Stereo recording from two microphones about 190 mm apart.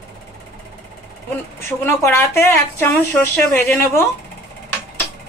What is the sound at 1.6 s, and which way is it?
Speech, 15° left (ahead or behind).